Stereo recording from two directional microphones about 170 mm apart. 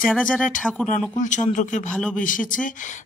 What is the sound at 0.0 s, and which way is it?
Speech, 5° left (ahead or behind).